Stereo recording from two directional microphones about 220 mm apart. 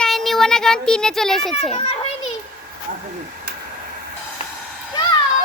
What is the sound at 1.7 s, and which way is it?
Speech, 25° left (ahead or behind).